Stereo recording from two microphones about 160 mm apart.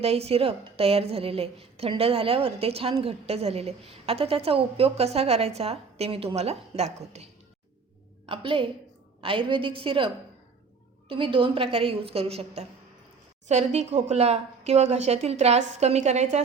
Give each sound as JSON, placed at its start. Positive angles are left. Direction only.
{"t": 0.0, "sound": "a woman's voice", "side_deg": -40}
{"t": 8.3, "sound": "a woman's voice", "side_deg": -30}
{"t": 11.1, "sound": "a woman's voice", "side_deg": -35}